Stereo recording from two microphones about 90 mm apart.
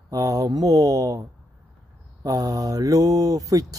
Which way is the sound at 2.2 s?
40° right (ahead or behind).